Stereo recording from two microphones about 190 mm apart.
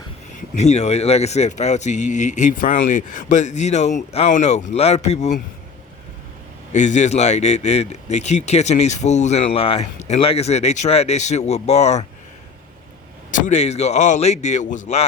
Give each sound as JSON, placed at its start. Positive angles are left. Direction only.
{"t": 0.5, "sound": "speech", "side_deg": 35}
{"t": 6.7, "sound": "speech", "side_deg": 40}
{"t": 13.3, "sound": "speech", "side_deg": 40}